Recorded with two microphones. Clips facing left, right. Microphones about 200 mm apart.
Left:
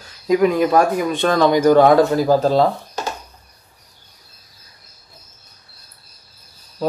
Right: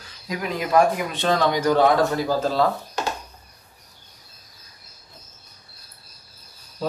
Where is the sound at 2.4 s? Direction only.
30° left (ahead or behind).